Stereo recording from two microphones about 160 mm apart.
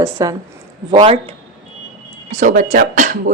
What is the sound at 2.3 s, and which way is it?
Speech, 50° right (ahead or behind).